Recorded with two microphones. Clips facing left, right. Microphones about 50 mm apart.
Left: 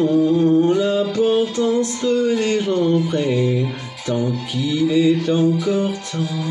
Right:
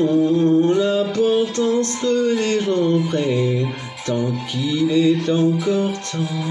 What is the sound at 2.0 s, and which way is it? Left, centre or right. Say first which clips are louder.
Speech: left 1 dB; centre.